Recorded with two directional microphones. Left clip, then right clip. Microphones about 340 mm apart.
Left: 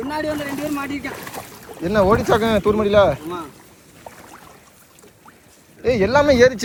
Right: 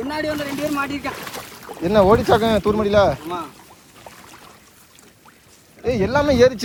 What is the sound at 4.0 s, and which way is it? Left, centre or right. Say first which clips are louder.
Boat: left 2 dB; centre.